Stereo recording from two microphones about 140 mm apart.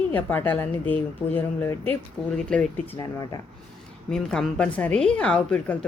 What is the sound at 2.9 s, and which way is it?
Speech, 25° left (ahead or behind).